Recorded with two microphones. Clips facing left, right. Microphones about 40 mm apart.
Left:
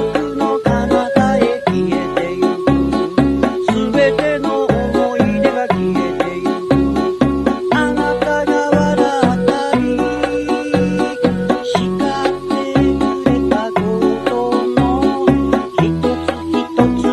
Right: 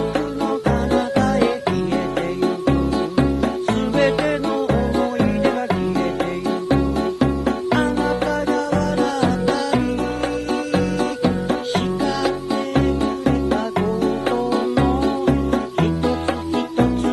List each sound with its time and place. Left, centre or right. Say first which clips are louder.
0.4 s music: left 6 dB; left
3.3 s music: left 5 dB; left
4.2 s music: left 5 dB; left
4.6 s music: left 4 dB; left
7.4 s music: left 4 dB; left